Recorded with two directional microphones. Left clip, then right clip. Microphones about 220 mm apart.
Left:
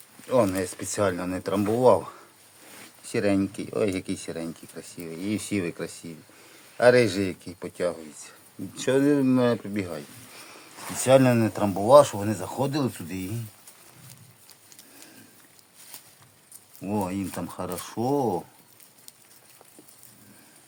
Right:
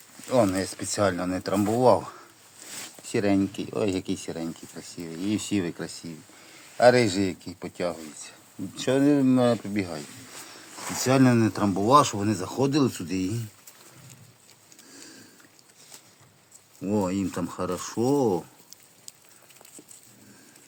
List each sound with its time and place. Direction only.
0.3 s speech: 5° right (ahead or behind)
11.0 s speech: centre (ahead or behind)
16.8 s speech: 5° right (ahead or behind)